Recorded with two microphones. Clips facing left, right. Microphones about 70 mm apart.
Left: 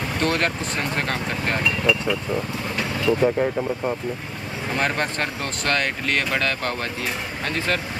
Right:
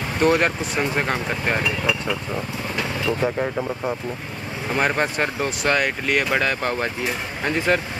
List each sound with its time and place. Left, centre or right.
0.2 s speech: centre